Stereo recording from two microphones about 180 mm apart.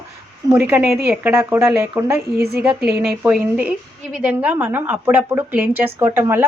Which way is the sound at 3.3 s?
5° right (ahead or behind).